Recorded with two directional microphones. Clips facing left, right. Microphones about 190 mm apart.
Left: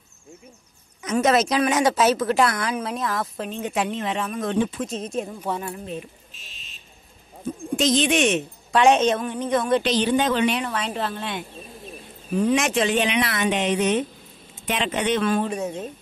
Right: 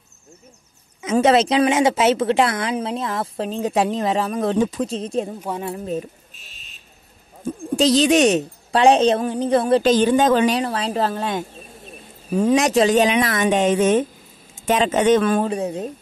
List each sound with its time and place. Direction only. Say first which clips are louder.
1.0 s a woman's voice: right 4 dB; 30° right (ahead or behind)
7.4 s a woman's voice: right 4 dB; 35° right (ahead or behind)
9.8 s speech: right 6 dB; 45° right (ahead or behind)
11.5 s a sound: left 1 dB; centre (ahead or behind)
12.3 s speech: right 4 dB; 40° right (ahead or behind)
15.4 s speech: right 4 dB; 35° right (ahead or behind)